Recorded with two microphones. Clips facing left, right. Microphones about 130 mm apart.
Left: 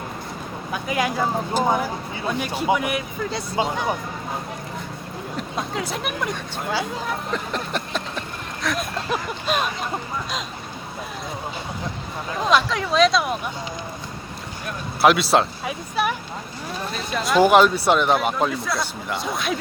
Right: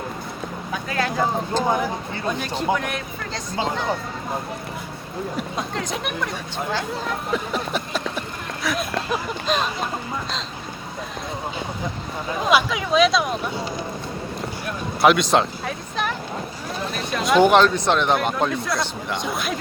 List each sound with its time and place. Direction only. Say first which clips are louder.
0.7 s speech: left 2 dB; 10° left (ahead or behind)
5.4 s speech: left 3 dB; centre (ahead or behind)
7.3 s a sound: right 2 dB; 5° right (ahead or behind)
9.5 s speech: right 1 dB; 10° left (ahead or behind)
12.5 s speech: right 1 dB; 5° right (ahead or behind)
15.0 s speech: even; 5° left (ahead or behind)